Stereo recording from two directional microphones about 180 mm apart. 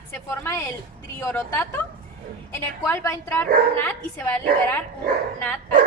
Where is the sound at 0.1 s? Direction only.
15° left (ahead or behind).